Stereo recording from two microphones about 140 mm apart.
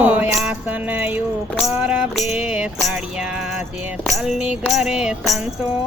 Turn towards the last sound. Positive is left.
turn(degrees=0)  # may be behind; listen again after turning